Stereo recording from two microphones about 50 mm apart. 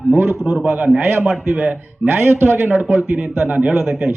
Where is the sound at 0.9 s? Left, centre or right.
Right.